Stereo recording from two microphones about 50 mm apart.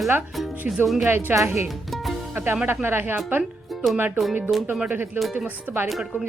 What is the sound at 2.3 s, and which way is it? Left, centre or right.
Speech, right.